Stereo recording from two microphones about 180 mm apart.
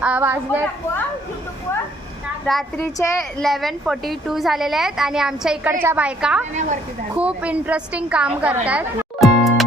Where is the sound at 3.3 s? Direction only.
Centre (ahead or behind).